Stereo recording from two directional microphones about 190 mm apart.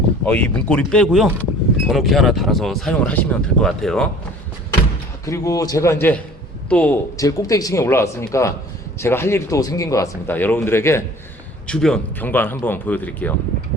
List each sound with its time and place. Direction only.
0.3 s speech: 5° left (ahead or behind)
5.2 s speech: 15° left (ahead or behind)
7.2 s speech: 20° left (ahead or behind)